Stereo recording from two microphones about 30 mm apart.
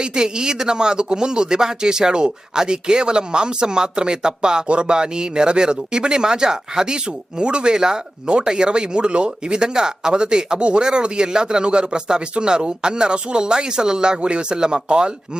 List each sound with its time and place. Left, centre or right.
0.0 s speech: right
14.2 s speech: right